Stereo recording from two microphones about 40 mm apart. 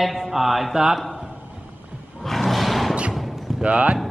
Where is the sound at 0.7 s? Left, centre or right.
Centre.